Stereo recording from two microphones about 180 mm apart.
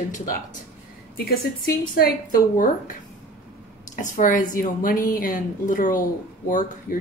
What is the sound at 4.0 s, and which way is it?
A woman's voice, 45° left (ahead or behind).